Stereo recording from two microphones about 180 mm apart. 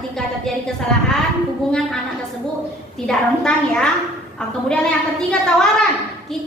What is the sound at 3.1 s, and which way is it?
A woman's voice, 5° left (ahead or behind).